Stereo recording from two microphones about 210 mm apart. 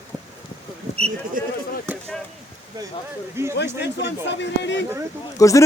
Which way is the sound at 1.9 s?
10° right (ahead or behind).